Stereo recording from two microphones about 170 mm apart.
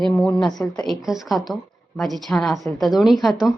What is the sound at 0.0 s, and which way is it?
A woman's voice, 5° left (ahead or behind).